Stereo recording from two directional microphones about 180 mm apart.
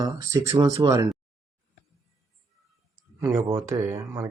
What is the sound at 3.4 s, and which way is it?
Speech, 20° right (ahead or behind).